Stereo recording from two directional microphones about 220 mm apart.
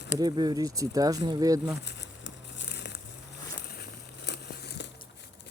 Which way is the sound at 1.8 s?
50° left (ahead or behind).